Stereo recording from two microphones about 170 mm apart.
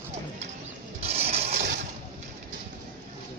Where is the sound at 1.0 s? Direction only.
35° right (ahead or behind).